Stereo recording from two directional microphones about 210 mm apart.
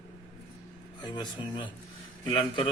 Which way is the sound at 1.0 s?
20° left (ahead or behind).